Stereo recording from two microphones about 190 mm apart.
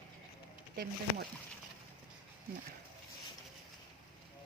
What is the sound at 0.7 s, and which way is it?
Speech, 55° right (ahead or behind).